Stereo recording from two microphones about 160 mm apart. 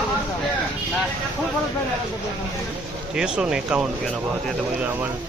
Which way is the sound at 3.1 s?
5° right (ahead or behind).